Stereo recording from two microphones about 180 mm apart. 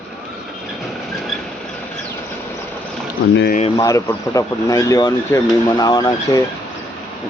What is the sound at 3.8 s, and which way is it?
Speech, 20° left (ahead or behind).